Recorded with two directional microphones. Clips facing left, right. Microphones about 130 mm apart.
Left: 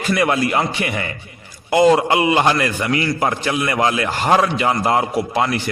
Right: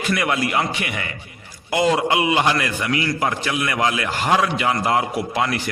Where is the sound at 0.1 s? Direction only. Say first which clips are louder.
Left 4 dB; 35° left (ahead or behind).